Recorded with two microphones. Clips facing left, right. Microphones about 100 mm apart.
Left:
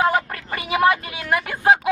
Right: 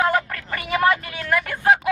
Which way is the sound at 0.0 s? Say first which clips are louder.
Left 1 dB; 20° left (ahead or behind).